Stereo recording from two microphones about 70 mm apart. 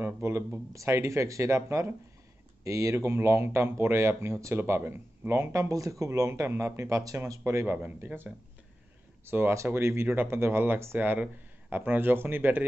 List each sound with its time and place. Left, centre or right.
0.0 s speech: right
7.4 s speech: right
7.7 s speech: right